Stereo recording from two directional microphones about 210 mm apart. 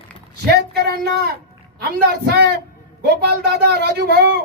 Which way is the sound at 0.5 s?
50° right (ahead or behind).